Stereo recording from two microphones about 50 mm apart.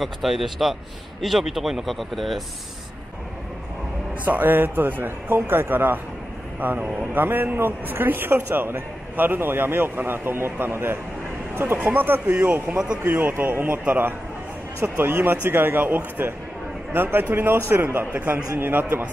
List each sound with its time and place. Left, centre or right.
0.0 s speech: centre
4.2 s a man's voice: right
12.7 s speech: centre
13.0 s a man's voice: right